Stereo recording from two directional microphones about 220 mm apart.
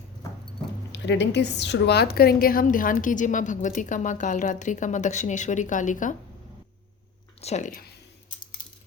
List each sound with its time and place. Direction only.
0.9 s a woman's voice: 55° left (ahead or behind); by 6.1 s 35° left (ahead or behind)
7.4 s a woman's voice: 35° left (ahead or behind)